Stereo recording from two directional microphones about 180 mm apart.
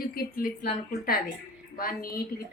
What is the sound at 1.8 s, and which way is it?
Speech, 55° left (ahead or behind).